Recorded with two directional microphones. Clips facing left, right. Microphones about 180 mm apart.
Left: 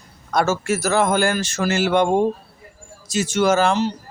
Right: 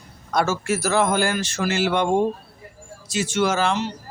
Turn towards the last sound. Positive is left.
turn(degrees=40)  # may be behind; listen again after turning